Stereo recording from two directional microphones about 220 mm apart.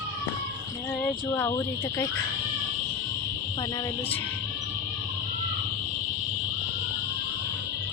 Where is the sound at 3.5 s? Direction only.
20° left (ahead or behind).